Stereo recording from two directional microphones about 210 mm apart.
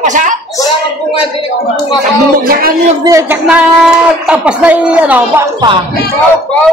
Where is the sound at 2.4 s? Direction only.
45° right (ahead or behind).